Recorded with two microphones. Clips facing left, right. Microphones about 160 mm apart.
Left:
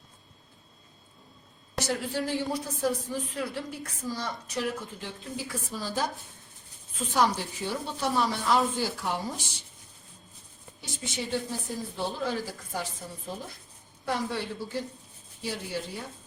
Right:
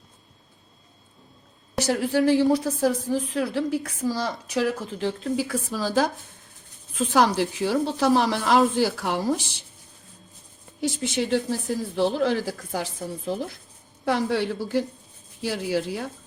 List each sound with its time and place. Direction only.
1.8 s a woman's voice: 80° right
10.8 s a woman's voice: 90° right